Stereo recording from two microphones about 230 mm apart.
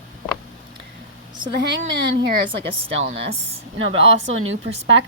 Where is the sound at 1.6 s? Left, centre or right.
Right.